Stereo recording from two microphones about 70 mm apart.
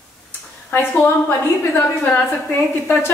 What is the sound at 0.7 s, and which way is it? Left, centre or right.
A woman's voice, left.